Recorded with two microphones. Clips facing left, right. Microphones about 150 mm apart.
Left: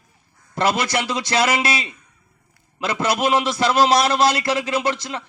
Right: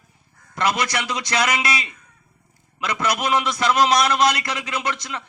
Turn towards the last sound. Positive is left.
turn(degrees=30)  # may be behind; listen again after turning